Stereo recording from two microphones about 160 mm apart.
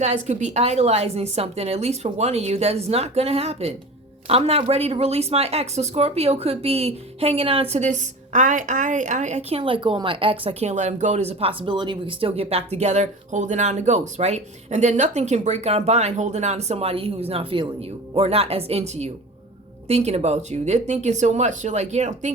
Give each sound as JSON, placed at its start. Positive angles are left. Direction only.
{"t": 0.0, "sound": "speech", "side_deg": -45}